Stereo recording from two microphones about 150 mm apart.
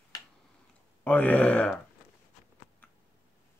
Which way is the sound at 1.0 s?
10° left (ahead or behind).